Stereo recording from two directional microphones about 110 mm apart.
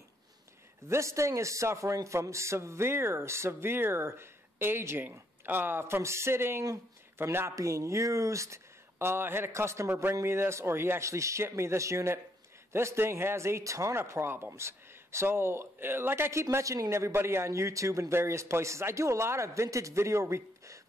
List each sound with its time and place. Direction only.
0.8 s a man's voice: 25° right (ahead or behind)